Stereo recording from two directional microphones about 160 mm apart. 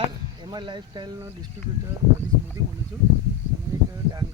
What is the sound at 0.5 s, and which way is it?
Speech, 30° right (ahead or behind).